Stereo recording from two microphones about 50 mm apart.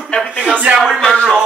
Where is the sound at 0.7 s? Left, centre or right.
Right.